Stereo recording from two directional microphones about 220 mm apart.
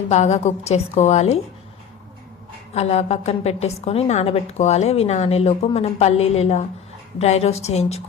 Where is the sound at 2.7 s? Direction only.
30° left (ahead or behind).